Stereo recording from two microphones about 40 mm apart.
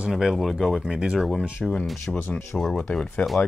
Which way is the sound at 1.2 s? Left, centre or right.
Centre.